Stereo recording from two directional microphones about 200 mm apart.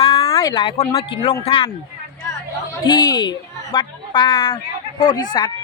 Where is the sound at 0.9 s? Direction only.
30° left (ahead or behind).